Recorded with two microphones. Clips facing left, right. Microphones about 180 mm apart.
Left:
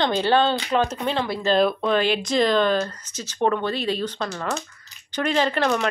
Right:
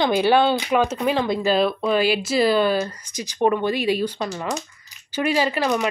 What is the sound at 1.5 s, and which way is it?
Speech, 5° right (ahead or behind).